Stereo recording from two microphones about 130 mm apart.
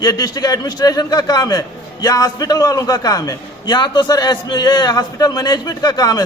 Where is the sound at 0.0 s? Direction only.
30° left (ahead or behind).